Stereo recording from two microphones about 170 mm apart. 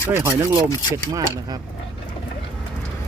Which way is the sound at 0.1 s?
15° right (ahead or behind).